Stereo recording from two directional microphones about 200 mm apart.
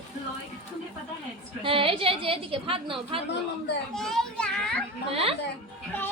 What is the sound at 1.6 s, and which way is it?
A woman's voice, 25° right (ahead or behind).